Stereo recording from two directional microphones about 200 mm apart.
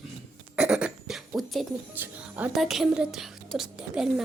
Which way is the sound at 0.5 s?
5° right (ahead or behind).